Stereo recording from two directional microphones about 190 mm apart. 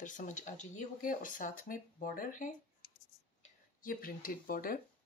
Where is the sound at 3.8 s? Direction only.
45° left (ahead or behind).